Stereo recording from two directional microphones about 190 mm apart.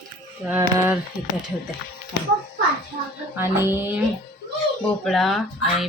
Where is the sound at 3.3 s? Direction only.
10° right (ahead or behind).